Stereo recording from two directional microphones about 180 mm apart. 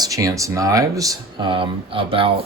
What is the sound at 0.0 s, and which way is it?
Speech, 20° right (ahead or behind).